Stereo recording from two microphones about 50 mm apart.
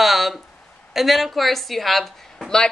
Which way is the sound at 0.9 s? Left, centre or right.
Centre.